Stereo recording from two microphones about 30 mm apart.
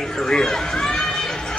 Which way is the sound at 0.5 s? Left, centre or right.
Centre.